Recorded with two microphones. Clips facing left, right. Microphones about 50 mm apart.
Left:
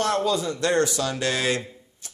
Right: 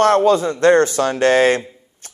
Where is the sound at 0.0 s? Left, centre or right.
Right.